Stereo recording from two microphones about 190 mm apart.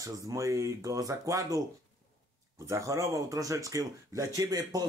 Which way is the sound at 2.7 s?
15° right (ahead or behind).